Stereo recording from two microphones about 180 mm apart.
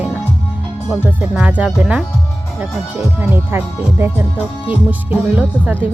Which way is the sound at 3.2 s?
10° right (ahead or behind).